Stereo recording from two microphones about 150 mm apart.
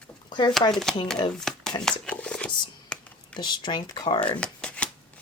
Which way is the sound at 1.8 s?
5° left (ahead or behind).